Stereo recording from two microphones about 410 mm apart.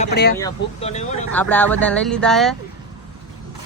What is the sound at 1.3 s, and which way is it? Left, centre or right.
Speech, centre.